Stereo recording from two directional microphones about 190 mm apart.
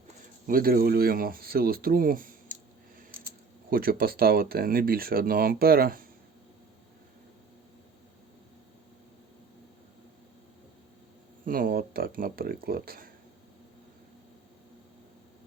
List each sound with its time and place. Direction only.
0.4 s speech: 50° right (ahead or behind)
3.7 s speech: 50° right (ahead or behind)
11.4 s speech: 50° right (ahead or behind)